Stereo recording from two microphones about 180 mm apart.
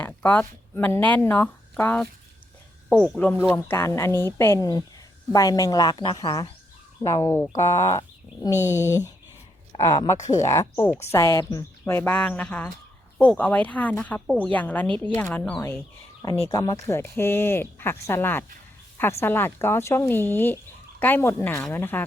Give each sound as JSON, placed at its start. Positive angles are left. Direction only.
{"t": 0.0, "sound": "a woman's voice", "side_deg": 10}
{"t": 8.6, "sound": "speech", "side_deg": -10}
{"t": 9.7, "sound": "speech", "side_deg": 20}
{"t": 16.5, "sound": "speech", "side_deg": 20}